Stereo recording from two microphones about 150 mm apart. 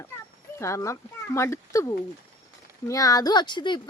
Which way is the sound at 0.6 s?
20° left (ahead or behind).